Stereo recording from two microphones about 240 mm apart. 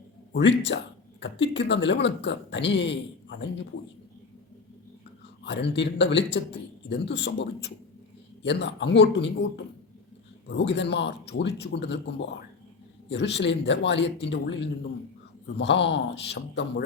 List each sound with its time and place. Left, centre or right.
0.3 s speech: left
5.4 s speech: left
10.5 s speech: left
15.5 s speech: left